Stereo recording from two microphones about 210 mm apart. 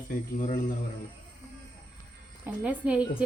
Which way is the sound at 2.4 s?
5° right (ahead or behind).